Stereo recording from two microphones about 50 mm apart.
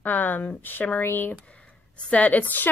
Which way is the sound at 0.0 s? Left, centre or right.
Left.